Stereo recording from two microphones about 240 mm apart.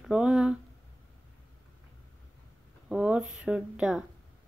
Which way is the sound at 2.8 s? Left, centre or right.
Centre.